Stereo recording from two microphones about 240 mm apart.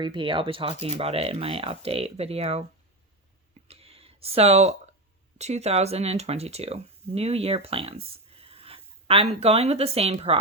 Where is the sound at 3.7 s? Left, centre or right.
Right.